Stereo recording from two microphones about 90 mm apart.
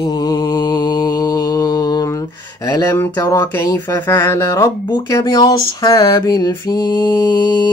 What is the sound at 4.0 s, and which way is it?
Mantra, 30° left (ahead or behind).